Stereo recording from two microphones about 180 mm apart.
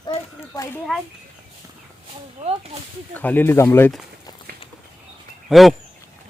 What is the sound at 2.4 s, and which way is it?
Snake, 35° right (ahead or behind).